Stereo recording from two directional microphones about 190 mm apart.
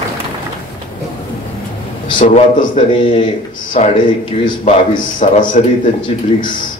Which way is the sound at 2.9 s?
25° left (ahead or behind).